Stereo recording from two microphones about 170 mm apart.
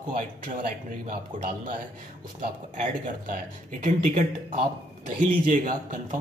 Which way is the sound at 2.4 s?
55° right (ahead or behind).